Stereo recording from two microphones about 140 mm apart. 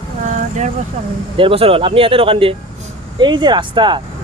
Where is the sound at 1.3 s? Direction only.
40° right (ahead or behind).